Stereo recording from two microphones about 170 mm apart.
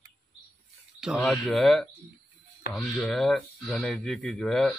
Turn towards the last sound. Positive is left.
turn(degrees=0)  # may be behind; listen again after turning